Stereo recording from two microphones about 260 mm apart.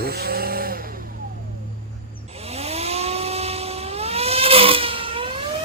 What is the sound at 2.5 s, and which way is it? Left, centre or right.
Vehicle, right.